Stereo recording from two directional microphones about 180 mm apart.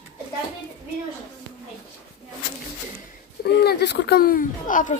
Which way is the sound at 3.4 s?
60° left (ahead or behind).